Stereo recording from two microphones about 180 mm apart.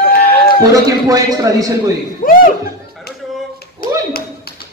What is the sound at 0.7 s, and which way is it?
Speech, 20° right (ahead or behind).